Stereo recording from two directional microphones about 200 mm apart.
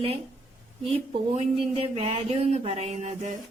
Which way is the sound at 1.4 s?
30° right (ahead or behind).